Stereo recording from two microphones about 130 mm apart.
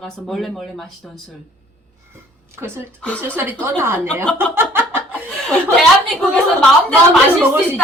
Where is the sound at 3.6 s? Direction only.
20° right (ahead or behind).